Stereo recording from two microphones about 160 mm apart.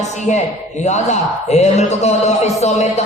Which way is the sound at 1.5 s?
45° left (ahead or behind).